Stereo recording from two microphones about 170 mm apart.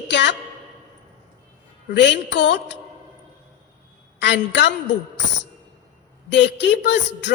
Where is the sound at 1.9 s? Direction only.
90° left.